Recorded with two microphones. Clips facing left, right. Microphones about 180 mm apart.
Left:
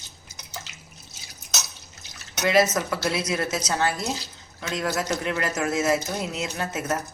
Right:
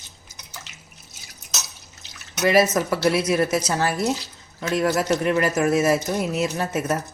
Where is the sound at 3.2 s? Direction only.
30° right (ahead or behind).